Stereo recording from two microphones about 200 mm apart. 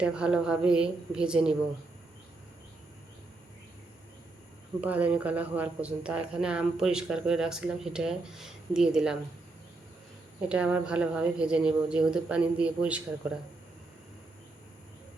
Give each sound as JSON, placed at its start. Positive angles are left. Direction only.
{"t": 0.0, "sound": "speech", "side_deg": -5}
{"t": 4.8, "sound": "speech", "side_deg": -5}
{"t": 10.5, "sound": "speech", "side_deg": -5}